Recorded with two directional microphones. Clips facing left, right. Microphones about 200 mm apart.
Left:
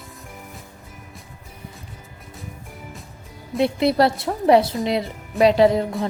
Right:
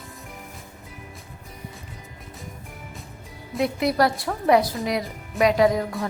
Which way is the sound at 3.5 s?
30° left (ahead or behind).